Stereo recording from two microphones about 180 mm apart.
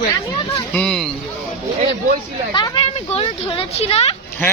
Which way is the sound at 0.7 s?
5° left (ahead or behind).